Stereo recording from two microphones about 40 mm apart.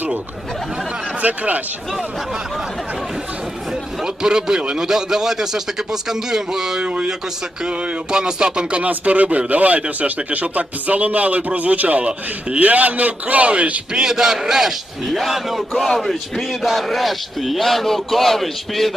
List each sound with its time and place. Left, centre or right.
1.2 s a man's voice: right
2.0 s a man's voice: centre
3.7 s a man's voice: centre
6.8 s speech: right
8.8 s a man's voice: right
10.0 s speech: right
10.3 s a man's voice: right
13.9 s a man's voice: centre